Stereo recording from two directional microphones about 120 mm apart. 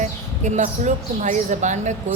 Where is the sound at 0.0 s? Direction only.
80° right.